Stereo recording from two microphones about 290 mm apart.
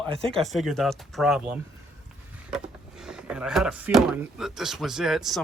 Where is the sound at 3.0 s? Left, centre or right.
Centre.